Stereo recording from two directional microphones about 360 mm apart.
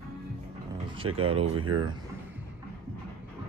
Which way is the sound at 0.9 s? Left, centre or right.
Centre.